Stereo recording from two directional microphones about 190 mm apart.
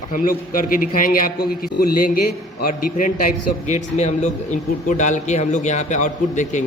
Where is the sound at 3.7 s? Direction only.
40° left (ahead or behind).